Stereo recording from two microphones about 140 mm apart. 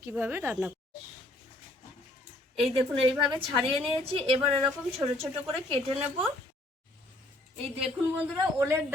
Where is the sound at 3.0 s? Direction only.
40° right (ahead or behind).